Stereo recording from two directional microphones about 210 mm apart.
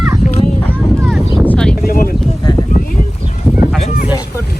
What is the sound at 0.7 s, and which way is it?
Vehicle, 5° right (ahead or behind).